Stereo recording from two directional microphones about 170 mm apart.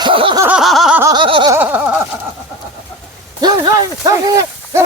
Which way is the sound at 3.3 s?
25° right (ahead or behind).